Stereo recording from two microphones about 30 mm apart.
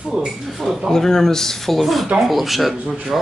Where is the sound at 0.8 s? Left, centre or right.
Centre.